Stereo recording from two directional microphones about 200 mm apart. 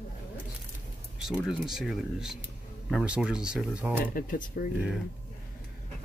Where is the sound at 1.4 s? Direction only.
5° right (ahead or behind).